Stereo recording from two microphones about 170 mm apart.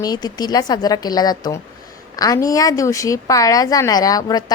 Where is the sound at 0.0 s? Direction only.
25° left (ahead or behind).